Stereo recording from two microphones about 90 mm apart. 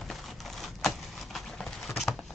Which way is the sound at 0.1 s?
Centre (ahead or behind).